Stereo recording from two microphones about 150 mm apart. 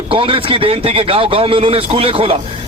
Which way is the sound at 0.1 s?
35° right (ahead or behind).